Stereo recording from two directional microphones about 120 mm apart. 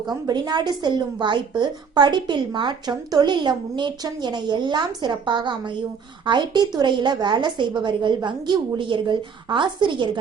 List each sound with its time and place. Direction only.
0.0 s speech: 35° right (ahead or behind)